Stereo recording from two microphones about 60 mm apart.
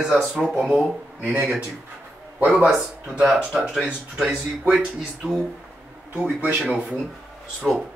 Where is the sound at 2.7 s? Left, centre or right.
Centre.